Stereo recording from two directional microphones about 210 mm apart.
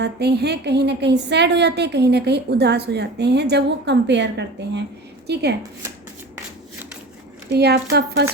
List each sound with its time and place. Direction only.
0.0 s a woman's voice: 50° right (ahead or behind)
7.5 s a woman's voice: 50° right (ahead or behind)